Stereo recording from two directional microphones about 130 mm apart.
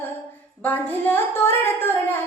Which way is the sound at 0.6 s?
15° left (ahead or behind).